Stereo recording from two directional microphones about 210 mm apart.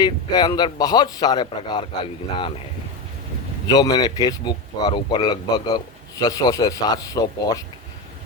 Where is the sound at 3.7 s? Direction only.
20° left (ahead or behind).